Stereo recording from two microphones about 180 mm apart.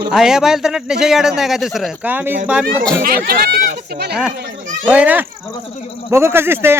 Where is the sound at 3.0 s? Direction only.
55° right (ahead or behind).